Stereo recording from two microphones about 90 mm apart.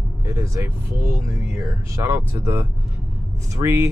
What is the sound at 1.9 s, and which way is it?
Speech, 30° right (ahead or behind).